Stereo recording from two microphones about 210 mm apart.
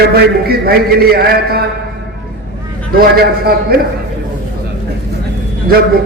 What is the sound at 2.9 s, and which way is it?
Speech, 45° right (ahead or behind).